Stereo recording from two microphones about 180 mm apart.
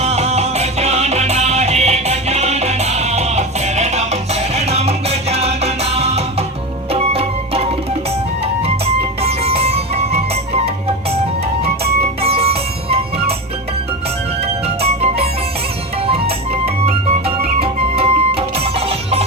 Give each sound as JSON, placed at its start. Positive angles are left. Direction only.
{"t": 0.0, "sound": "music", "side_deg": -35}
{"t": 9.2, "sound": "music", "side_deg": -35}
{"t": 12.2, "sound": "music", "side_deg": -35}
{"t": 14.8, "sound": "music", "side_deg": -35}